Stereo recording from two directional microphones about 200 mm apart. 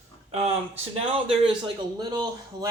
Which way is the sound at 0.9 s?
25° right (ahead or behind).